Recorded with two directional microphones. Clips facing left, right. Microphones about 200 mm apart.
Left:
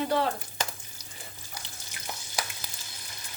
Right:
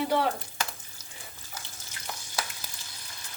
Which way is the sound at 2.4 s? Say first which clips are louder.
Even; 15° left (ahead or behind).